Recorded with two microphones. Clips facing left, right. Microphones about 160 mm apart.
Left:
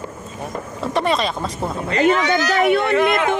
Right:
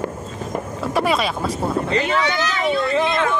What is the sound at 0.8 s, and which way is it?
Speech, 5° right (ahead or behind).